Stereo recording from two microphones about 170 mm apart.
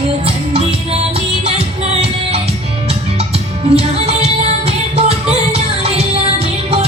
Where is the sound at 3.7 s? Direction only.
35° right (ahead or behind).